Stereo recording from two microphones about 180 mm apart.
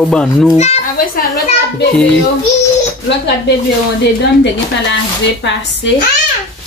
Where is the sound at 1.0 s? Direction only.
50° left (ahead or behind).